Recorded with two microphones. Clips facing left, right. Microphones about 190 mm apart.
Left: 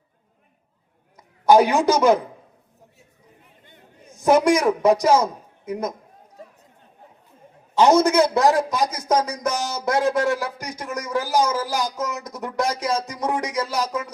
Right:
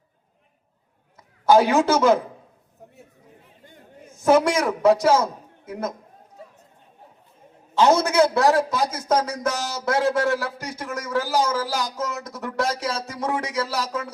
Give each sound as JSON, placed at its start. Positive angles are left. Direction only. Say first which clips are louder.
{"t": 1.5, "sound": "a man's voice", "louder": "left 1 dB", "side_deg": 15}
{"t": 4.1, "sound": "a man's voice", "louder": "left 1 dB", "side_deg": 15}
{"t": 7.8, "sound": "a man's voice", "louder": "left 2 dB", "side_deg": 15}